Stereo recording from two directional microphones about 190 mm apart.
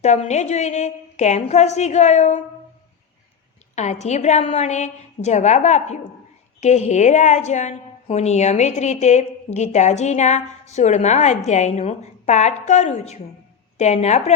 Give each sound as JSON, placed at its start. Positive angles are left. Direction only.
{"t": 0.0, "sound": "a woman's voice", "side_deg": 35}
{"t": 3.8, "sound": "a woman's voice", "side_deg": 35}